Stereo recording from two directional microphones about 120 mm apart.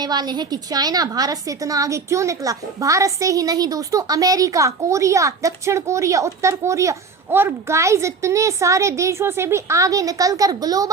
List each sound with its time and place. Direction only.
0.0 s a woman's voice: 35° right (ahead or behind)